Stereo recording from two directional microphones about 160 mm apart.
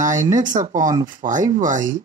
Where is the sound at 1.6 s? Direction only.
50° right (ahead or behind).